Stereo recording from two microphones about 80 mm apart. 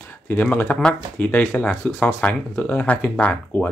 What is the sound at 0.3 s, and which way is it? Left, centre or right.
Speech, left.